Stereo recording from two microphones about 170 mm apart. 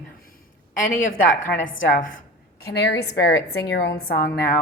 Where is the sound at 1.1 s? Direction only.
50° left (ahead or behind).